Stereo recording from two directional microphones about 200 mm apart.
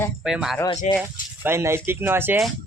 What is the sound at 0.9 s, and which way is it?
Speech, 35° left (ahead or behind).